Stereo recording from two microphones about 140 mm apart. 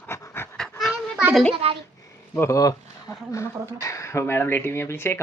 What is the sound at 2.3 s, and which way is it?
Speech, 20° left (ahead or behind).